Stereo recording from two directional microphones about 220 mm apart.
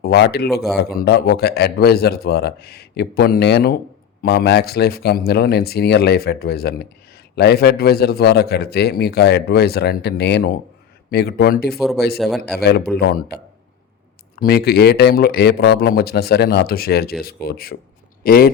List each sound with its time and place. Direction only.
0.0 s speech: 45° left (ahead or behind)